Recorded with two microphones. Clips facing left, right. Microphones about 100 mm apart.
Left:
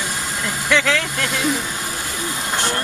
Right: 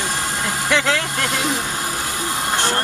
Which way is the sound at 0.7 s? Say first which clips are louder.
Left 1 dB; 30° right (ahead or behind).